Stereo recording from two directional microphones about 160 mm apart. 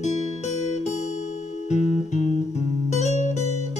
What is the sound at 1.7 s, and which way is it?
Music, 45° left (ahead or behind).